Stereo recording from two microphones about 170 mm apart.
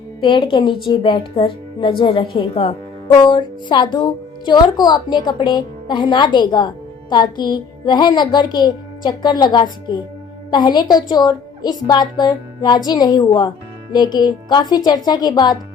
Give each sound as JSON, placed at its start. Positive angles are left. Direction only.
{"t": 0.2, "sound": "a woman's voice", "side_deg": 30}